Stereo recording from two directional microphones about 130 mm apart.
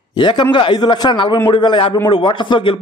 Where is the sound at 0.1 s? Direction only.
35° left (ahead or behind).